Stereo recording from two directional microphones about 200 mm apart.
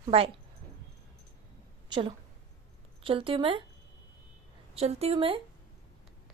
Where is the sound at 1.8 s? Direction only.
25° right (ahead or behind).